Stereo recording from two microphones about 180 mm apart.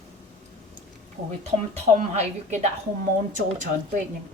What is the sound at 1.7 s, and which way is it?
Speech, 35° right (ahead or behind).